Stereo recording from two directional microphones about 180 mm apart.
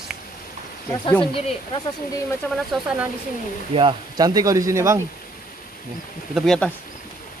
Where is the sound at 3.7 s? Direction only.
25° right (ahead or behind).